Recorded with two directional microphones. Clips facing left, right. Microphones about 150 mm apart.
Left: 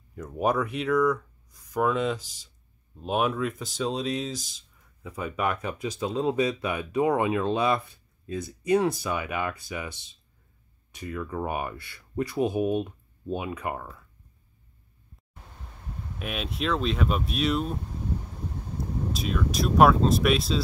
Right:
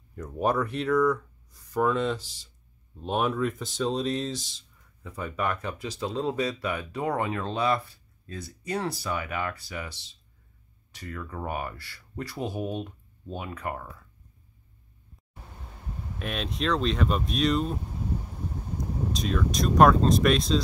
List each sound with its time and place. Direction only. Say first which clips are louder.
0.1 s speech: left 1 dB; 10° left (ahead or behind)
1.6 s speech: even; 10° left (ahead or behind)
16.2 s speech: even; 5° left (ahead or behind)
19.1 s speech: right 1 dB; 5° left (ahead or behind)